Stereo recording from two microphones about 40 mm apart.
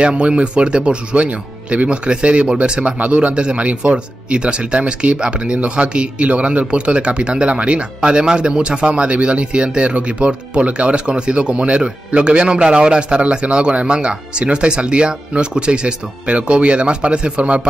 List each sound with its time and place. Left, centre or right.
0.0 s speech: right